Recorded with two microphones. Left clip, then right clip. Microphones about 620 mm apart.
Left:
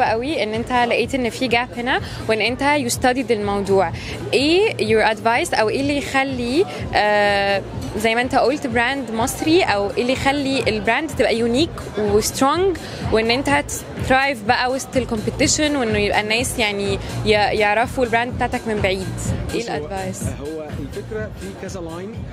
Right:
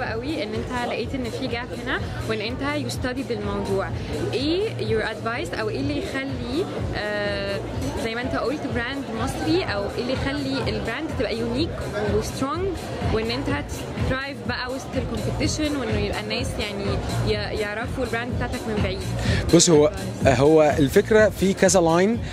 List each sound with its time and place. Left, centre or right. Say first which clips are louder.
0.0 s speech: left 9 dB; left
19.6 s speech: right 6 dB; right